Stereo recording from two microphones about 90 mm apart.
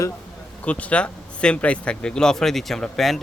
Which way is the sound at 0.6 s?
15° left (ahead or behind).